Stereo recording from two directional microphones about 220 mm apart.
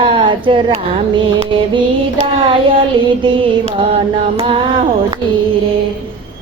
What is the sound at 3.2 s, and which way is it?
Speech, 20° right (ahead or behind).